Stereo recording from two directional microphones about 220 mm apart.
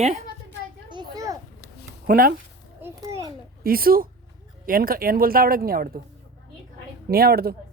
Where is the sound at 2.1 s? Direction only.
40° right (ahead or behind).